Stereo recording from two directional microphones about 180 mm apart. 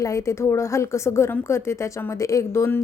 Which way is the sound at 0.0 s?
15° left (ahead or behind).